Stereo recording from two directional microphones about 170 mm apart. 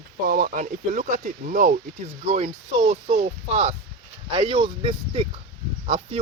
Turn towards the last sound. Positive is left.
turn(degrees=-35)  # may be behind; listen again after turning